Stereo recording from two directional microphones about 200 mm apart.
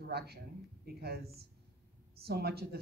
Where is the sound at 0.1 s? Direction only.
55° right (ahead or behind).